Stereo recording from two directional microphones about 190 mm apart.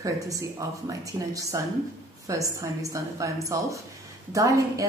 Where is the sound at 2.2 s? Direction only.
15° right (ahead or behind).